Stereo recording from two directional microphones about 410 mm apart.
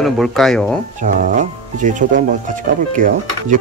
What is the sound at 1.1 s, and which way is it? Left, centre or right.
Speech, centre.